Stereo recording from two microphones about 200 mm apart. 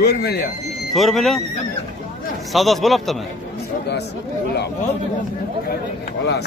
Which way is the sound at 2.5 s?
Centre (ahead or behind).